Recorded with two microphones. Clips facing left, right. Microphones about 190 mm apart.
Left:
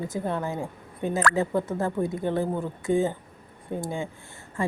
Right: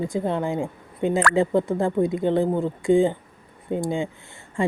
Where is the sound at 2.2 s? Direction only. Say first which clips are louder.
Right 6 dB; 25° right (ahead or behind).